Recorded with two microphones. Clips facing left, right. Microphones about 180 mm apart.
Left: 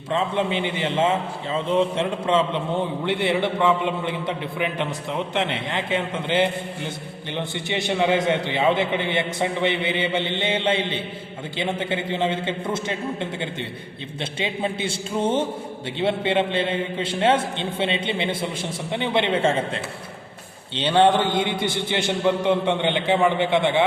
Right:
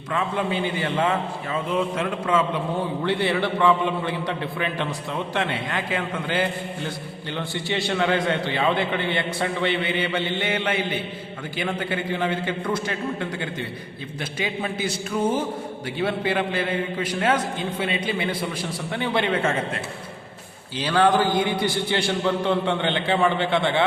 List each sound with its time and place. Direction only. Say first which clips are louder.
0.1 s a man's voice: left 2 dB; 25° left (ahead or behind)